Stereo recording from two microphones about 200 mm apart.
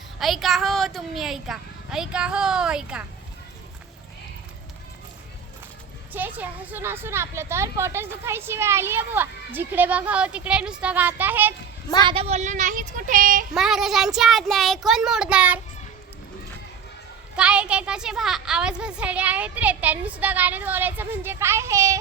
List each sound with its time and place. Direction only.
0.2 s a woman's voice: centre (ahead or behind)
6.1 s speech: 10° right (ahead or behind)
12.0 s speech: 30° right (ahead or behind)
13.5 s a woman's voice: centre (ahead or behind)
17.3 s speech: 5° right (ahead or behind)